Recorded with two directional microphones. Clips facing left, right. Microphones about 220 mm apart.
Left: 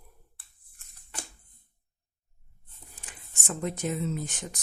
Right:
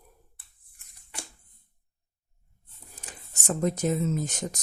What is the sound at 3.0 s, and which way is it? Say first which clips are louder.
Speech: right 5 dB; 40° right (ahead or behind).